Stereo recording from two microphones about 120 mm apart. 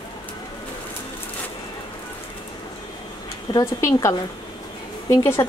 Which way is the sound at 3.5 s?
25° left (ahead or behind).